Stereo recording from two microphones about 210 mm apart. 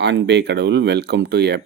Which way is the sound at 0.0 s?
55° right (ahead or behind).